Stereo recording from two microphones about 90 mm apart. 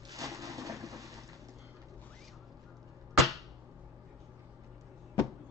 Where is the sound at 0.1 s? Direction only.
35° right (ahead or behind).